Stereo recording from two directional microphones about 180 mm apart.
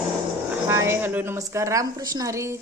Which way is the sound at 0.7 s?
15° right (ahead or behind).